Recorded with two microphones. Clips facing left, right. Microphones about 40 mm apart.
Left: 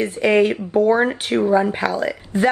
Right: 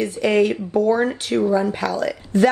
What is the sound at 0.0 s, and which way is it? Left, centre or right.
Speech, left.